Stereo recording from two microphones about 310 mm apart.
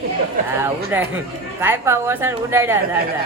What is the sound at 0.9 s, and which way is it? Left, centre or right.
A woman's voice, centre.